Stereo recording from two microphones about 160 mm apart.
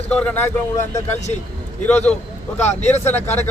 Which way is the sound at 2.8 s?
45° left (ahead or behind).